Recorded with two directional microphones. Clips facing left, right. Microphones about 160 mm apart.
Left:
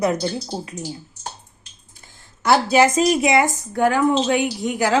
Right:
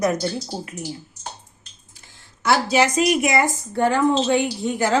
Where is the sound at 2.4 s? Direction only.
50° left (ahead or behind).